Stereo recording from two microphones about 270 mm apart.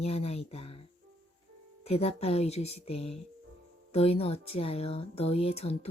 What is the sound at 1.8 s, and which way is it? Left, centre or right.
Speech, left.